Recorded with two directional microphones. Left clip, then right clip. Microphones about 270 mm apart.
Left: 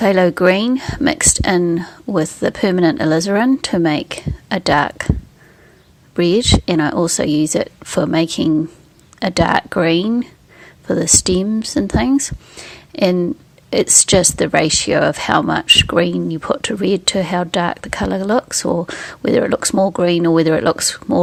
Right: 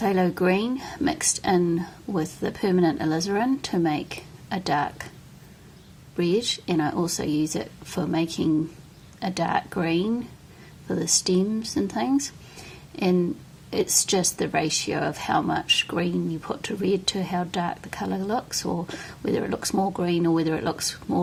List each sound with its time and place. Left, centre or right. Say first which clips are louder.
0.0 s speech: left 11 dB; left
6.1 s speech: left 10 dB; left